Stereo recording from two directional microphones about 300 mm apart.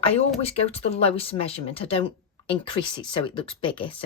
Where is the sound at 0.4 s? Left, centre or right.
Centre.